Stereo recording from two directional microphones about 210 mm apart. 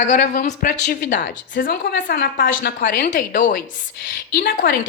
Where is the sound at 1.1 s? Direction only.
55° left (ahead or behind).